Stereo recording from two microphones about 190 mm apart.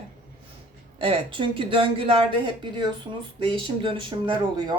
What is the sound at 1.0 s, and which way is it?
Speech, 30° right (ahead or behind).